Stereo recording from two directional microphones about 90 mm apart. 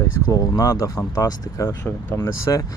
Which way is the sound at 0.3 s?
45° left (ahead or behind).